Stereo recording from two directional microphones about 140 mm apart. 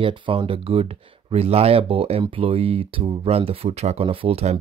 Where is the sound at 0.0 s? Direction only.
35° right (ahead or behind).